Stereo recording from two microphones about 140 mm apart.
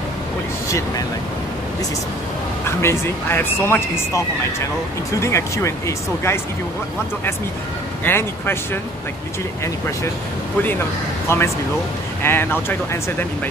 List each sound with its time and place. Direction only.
0.7 s speech: 20° left (ahead or behind)
2.8 s speech: 15° left (ahead or behind)
8.0 s speech: 15° left (ahead or behind)
11.2 s speech: 20° left (ahead or behind)